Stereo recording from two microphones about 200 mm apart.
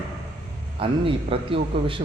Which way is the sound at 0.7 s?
25° right (ahead or behind).